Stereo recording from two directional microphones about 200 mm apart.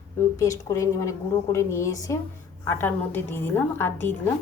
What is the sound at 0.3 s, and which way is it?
A woman's voice, 15° left (ahead or behind).